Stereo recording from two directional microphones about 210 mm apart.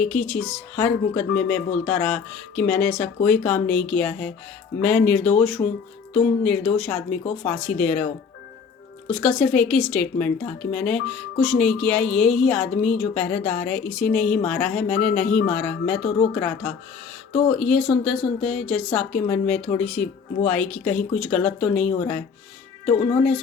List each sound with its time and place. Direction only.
0.0 s a woman's voice: 5° left (ahead or behind)
9.0 s a woman's voice: 5° left (ahead or behind)
18.2 s speech: 25° left (ahead or behind)
18.4 s a woman's voice: 5° left (ahead or behind)